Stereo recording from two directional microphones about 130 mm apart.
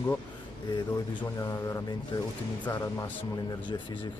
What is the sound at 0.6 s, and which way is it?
Speech, 35° left (ahead or behind).